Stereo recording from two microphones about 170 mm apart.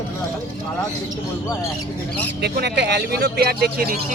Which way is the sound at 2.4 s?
75° right (ahead or behind).